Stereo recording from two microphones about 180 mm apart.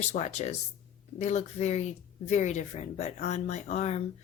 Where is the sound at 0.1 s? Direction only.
40° left (ahead or behind).